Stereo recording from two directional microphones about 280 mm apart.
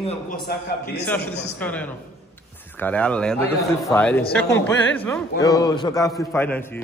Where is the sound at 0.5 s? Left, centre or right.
Left.